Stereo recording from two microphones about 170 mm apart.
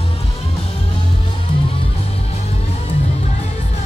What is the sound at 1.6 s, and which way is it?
Music, 35° left (ahead or behind).